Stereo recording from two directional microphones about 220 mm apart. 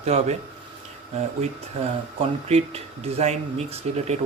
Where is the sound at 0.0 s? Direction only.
30° right (ahead or behind).